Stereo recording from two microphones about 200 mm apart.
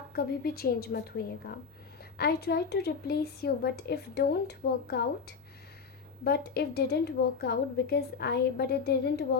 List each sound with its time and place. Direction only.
0.1 s a woman's voice: 50° left (ahead or behind)
6.2 s a woman's voice: 50° left (ahead or behind)